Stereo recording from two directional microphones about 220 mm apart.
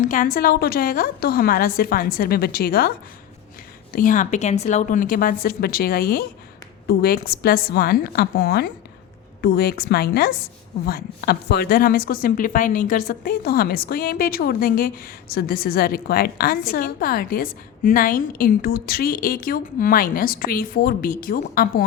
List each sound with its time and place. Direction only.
0.0 s a woman's voice: 35° left (ahead or behind)
3.9 s a woman's voice: 35° left (ahead or behind)